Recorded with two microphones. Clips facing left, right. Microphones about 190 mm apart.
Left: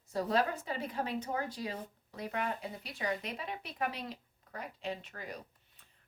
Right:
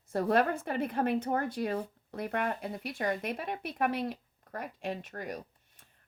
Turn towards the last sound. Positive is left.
turn(degrees=-50)  # may be behind; listen again after turning